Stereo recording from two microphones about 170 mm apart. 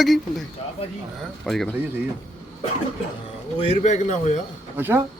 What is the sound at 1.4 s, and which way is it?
Speech, centre (ahead or behind).